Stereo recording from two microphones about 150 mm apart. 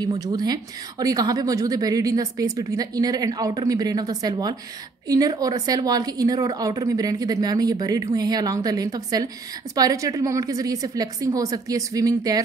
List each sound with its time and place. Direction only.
0.0 s a woman's voice: 25° right (ahead or behind)